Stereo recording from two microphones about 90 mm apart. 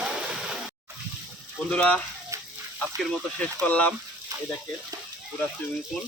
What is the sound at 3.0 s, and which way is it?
Speech, 15° left (ahead or behind).